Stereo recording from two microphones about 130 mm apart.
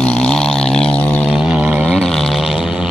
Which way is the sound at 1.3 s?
5° right (ahead or behind).